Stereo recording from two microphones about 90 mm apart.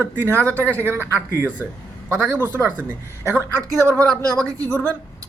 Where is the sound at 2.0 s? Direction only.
25° right (ahead or behind).